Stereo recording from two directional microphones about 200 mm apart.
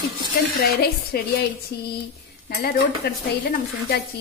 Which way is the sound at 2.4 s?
50° left (ahead or behind).